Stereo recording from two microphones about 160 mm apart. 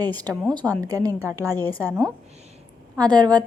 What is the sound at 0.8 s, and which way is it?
A woman's voice, 20° right (ahead or behind).